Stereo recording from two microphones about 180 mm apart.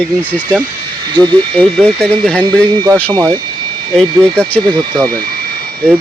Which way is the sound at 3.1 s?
20° right (ahead or behind).